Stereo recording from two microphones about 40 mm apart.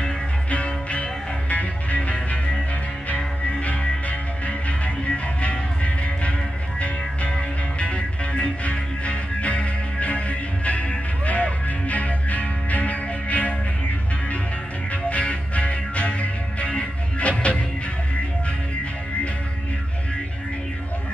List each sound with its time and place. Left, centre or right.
0.5 s music: left
14.9 s music: left